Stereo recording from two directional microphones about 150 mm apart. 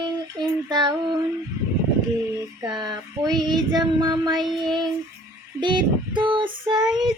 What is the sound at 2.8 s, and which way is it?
Child singing, 25° right (ahead or behind).